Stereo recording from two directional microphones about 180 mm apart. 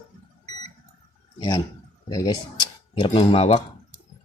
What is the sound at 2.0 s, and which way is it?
Speech, 20° left (ahead or behind).